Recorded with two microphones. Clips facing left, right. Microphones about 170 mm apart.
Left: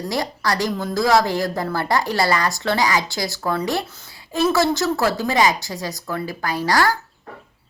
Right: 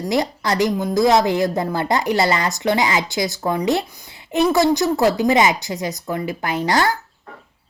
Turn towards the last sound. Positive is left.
turn(degrees=-20)  # may be behind; listen again after turning